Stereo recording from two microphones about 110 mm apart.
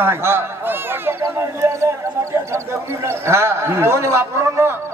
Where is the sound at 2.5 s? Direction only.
25° right (ahead or behind).